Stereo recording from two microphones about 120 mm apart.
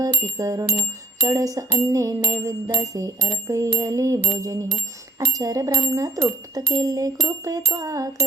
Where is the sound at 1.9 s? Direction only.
30° right (ahead or behind).